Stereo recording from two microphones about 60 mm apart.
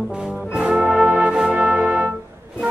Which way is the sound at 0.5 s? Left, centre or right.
Centre.